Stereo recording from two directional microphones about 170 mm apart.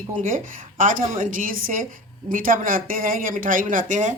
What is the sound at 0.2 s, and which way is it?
A woman's voice, 50° right (ahead or behind).